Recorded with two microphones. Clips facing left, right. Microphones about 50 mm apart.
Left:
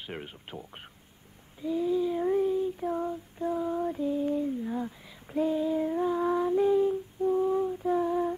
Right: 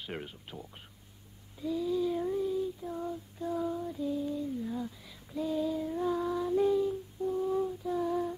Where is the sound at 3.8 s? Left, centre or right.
Left.